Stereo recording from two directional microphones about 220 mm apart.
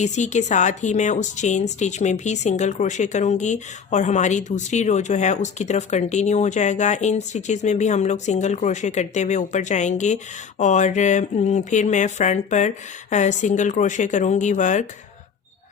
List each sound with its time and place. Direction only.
0.0 s a woman's voice: 30° left (ahead or behind)